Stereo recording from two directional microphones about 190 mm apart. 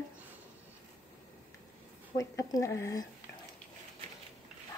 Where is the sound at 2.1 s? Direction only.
15° left (ahead or behind).